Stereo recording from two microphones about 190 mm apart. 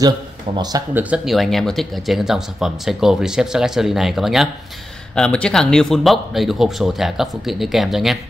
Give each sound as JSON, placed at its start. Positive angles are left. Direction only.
{"t": 0.6, "sound": "speech", "side_deg": -20}
{"t": 1.1, "sound": "speech", "side_deg": 0}